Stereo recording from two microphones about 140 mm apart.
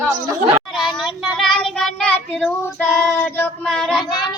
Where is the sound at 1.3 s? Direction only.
Centre (ahead or behind).